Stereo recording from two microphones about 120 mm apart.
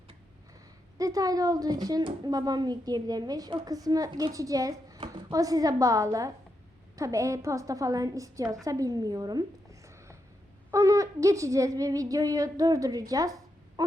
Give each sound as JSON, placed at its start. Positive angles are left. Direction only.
{"t": 0.9, "sound": "a woman's voice", "side_deg": -30}
{"t": 13.8, "sound": "frog", "side_deg": -35}